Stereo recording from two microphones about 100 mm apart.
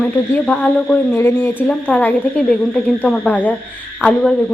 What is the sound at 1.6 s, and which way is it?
Speech, 15° left (ahead or behind).